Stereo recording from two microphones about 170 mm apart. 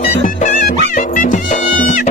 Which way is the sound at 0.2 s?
45° left (ahead or behind).